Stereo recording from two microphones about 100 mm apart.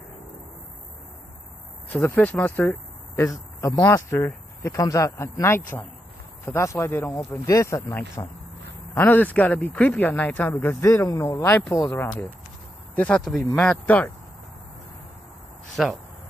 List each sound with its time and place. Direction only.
1.9 s speech: 20° left (ahead or behind)
3.2 s a man's voice: 30° left (ahead or behind)
8.9 s speech: 15° left (ahead or behind)
12.9 s speech: 15° left (ahead or behind)
15.7 s speech: centre (ahead or behind)